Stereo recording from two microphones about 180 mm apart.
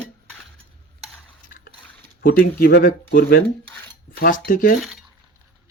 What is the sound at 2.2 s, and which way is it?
Speech, 55° left (ahead or behind).